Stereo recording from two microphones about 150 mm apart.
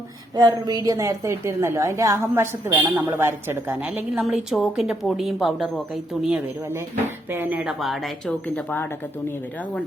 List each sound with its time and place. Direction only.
0.3 s a woman's voice: 30° right (ahead or behind); by 8.9 s 10° left (ahead or behind)